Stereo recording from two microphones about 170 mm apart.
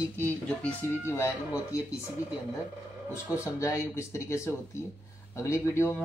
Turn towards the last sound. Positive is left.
turn(degrees=15)  # may be behind; listen again after turning